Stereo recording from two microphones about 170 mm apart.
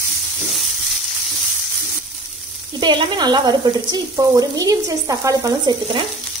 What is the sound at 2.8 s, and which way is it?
Speech, 25° right (ahead or behind).